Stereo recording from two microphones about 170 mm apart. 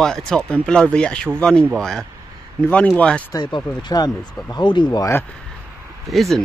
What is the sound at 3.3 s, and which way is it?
Speech, 25° left (ahead or behind).